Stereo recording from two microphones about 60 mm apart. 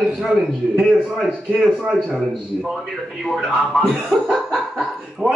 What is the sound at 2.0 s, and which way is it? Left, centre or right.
A man's voice, centre.